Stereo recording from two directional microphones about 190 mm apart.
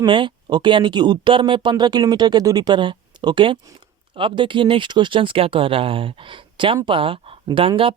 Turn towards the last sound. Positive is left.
turn(degrees=-30)  # may be behind; listen again after turning